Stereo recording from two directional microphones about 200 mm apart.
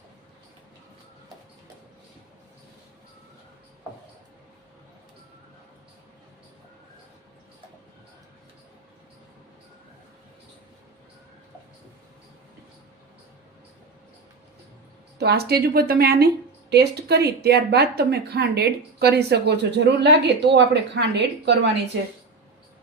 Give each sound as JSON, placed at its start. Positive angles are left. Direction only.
{"t": 15.2, "sound": "speech", "side_deg": -50}